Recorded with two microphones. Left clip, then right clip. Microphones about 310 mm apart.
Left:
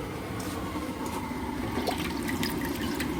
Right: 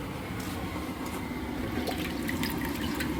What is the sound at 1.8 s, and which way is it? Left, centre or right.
Water, centre.